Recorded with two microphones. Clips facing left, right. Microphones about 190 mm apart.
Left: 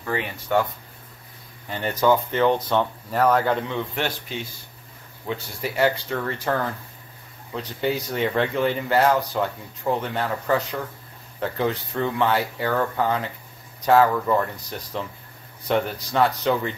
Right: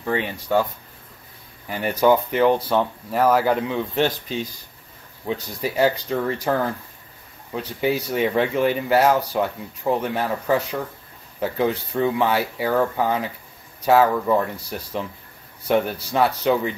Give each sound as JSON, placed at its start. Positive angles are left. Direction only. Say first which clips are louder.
{"t": 0.0, "sound": "speech", "louder": "right 3 dB", "side_deg": -20}
{"t": 1.7, "sound": "speech", "louder": "right 2 dB", "side_deg": -10}
{"t": 5.2, "sound": "speech", "louder": "right 3 dB", "side_deg": -15}